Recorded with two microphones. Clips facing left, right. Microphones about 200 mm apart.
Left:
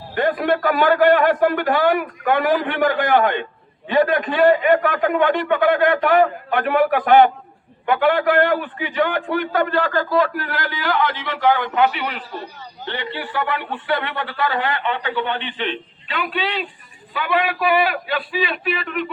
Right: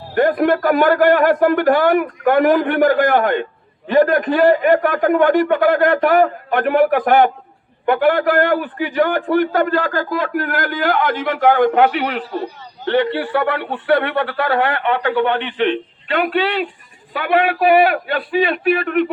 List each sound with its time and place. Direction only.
0.1 s a man's voice: 45° right (ahead or behind)